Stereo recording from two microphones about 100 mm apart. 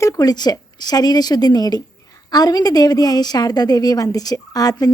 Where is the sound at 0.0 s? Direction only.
35° left (ahead or behind).